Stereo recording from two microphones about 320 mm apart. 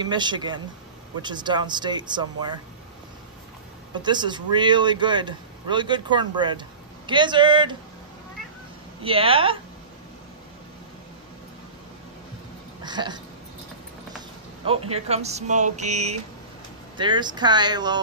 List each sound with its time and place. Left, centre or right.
0.0 s speech: centre
3.9 s speech: centre
9.0 s speech: centre
12.8 s a sound: centre
14.6 s speech: centre